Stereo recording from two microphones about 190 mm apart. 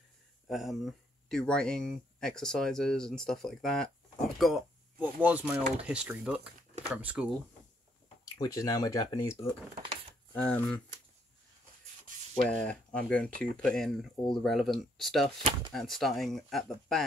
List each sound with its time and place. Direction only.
0.5 s speech: centre (ahead or behind)
8.4 s speech: 20° left (ahead or behind)
10.3 s speech: 5° left (ahead or behind)
12.4 s speech: 5° left (ahead or behind)